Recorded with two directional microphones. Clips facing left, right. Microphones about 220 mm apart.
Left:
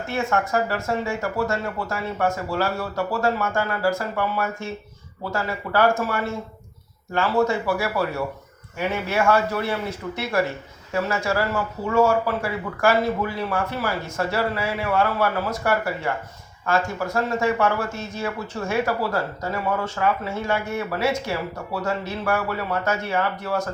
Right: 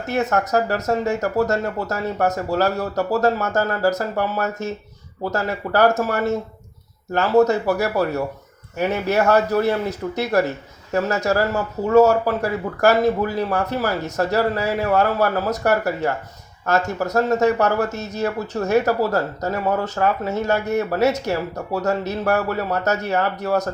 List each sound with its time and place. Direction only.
0.1 s speech: 40° right (ahead or behind)